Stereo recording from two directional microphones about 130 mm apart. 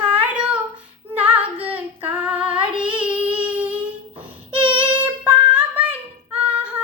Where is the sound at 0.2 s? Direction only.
10° right (ahead or behind).